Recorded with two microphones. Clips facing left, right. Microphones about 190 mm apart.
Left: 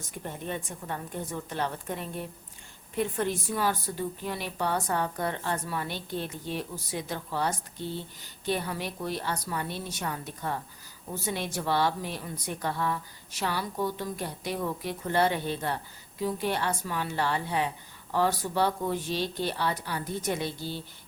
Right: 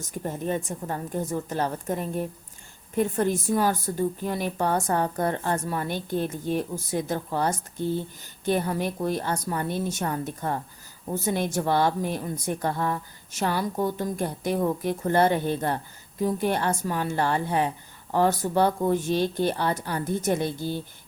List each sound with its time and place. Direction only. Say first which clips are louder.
0.1 s a woman's voice: right 7 dB; 40° right (ahead or behind)